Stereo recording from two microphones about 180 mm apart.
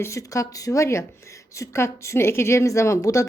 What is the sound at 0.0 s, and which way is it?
A woman's voice, 15° left (ahead or behind).